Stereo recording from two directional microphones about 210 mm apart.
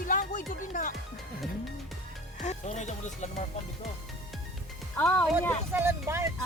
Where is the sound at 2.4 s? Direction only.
35° left (ahead or behind).